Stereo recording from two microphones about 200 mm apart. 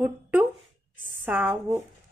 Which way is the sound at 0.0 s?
10° right (ahead or behind).